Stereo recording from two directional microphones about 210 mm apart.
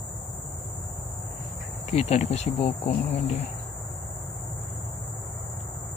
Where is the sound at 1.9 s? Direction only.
30° left (ahead or behind).